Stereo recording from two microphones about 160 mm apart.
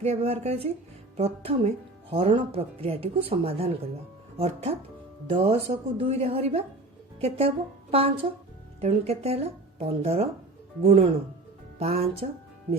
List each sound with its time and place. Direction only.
0.0 s speech: 40° right (ahead or behind)